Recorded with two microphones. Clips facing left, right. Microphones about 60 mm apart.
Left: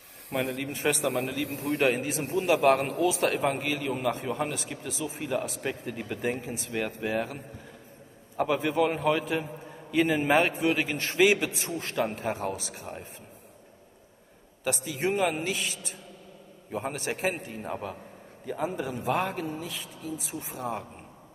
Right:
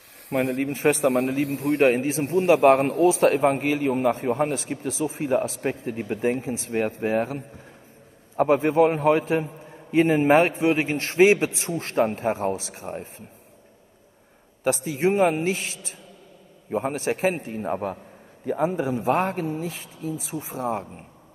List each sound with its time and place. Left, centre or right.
0.3 s a man's voice: right
0.6 s speech: right
1.4 s a man's voice: right
1.8 s a man's voice: right
2.2 s a man's voice: right
3.1 s a man's voice: right
8.4 s a man's voice: right
14.6 s a man's voice: right
16.7 s a man's voice: right
17.3 s a man's voice: right